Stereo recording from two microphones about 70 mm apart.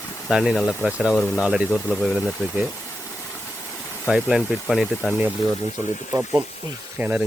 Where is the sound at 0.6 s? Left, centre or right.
Left.